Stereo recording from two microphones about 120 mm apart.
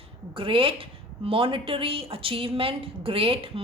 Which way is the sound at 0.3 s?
45° right (ahead or behind).